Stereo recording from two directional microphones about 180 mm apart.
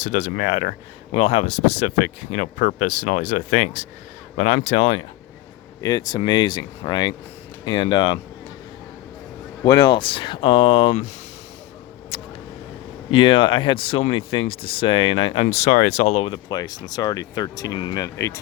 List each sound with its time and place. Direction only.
0.0 s speech: 45° left (ahead or behind)
5.8 s speech: 20° left (ahead or behind)
9.6 s speech: 25° left (ahead or behind)
12.1 s vehicle: 30° left (ahead or behind)
13.1 s speech: 30° left (ahead or behind)